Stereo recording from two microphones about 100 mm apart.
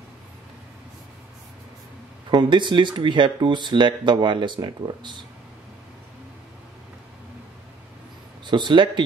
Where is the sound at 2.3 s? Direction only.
50° right (ahead or behind).